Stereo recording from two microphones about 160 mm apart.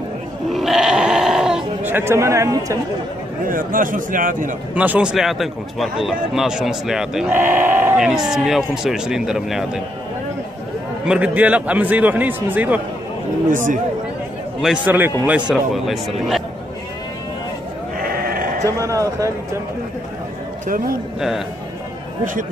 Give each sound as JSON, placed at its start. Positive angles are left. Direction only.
{"t": 0.5, "sound": "sheep", "side_deg": 0}
{"t": 3.4, "sound": "a man's voice", "side_deg": -60}
{"t": 4.7, "sound": "speech", "side_deg": -10}
{"t": 11.1, "sound": "a man's voice", "side_deg": -10}
{"t": 13.5, "sound": "a man's voice", "side_deg": -55}
{"t": 14.6, "sound": "a man's voice", "side_deg": -10}
{"t": 18.0, "sound": "sheep", "side_deg": -65}
{"t": 18.6, "sound": "a man's voice", "side_deg": -20}
{"t": 20.6, "sound": "a man's voice", "side_deg": -60}